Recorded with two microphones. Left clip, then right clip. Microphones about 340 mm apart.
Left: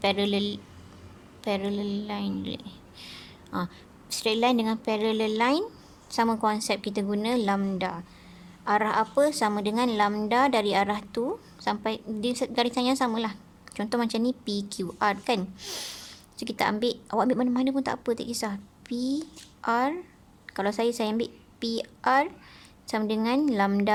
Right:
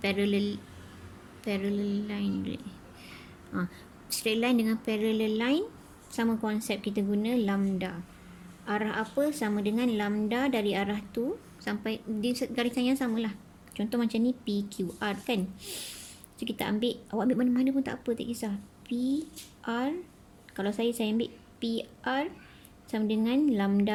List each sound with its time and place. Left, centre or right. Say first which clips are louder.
0.0 s a woman's voice: left 4 dB; centre